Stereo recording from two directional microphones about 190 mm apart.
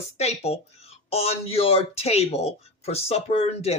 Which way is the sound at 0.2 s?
35° left (ahead or behind).